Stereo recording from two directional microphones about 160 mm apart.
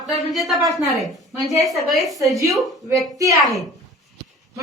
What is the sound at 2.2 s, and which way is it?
Speech, 20° right (ahead or behind).